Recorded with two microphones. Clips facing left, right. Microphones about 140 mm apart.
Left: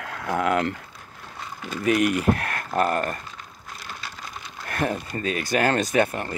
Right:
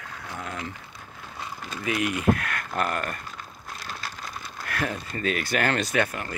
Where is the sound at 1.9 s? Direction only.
50° left (ahead or behind).